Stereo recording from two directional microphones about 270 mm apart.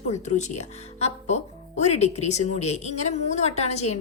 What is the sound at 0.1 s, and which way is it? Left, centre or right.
Speech, left.